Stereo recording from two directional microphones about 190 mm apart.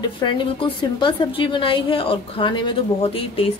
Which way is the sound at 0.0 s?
25° left (ahead or behind).